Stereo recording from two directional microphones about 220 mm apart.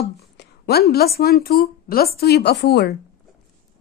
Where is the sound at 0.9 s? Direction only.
45° left (ahead or behind).